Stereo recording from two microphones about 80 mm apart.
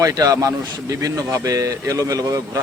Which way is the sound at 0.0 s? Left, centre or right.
Right.